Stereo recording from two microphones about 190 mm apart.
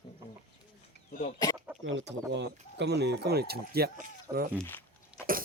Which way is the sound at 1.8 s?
80° right.